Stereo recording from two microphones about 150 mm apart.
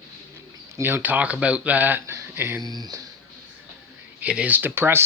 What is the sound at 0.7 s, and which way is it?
Speech, 15° right (ahead or behind).